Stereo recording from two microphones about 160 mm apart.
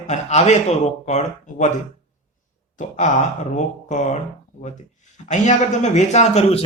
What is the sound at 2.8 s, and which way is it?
Speech, 50° left (ahead or behind).